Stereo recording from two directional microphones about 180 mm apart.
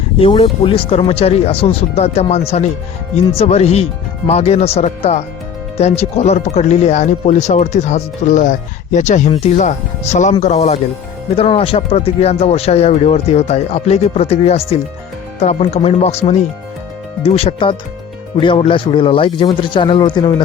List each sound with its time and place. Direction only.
0.2 s speech: 30° left (ahead or behind)